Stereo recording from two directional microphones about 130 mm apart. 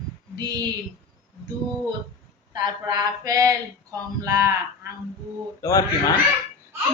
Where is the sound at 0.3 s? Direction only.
30° right (ahead or behind).